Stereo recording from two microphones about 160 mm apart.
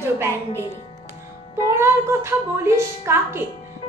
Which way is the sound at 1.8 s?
15° right (ahead or behind).